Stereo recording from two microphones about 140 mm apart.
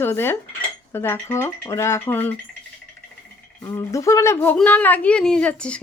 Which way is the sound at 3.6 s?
25° left (ahead or behind).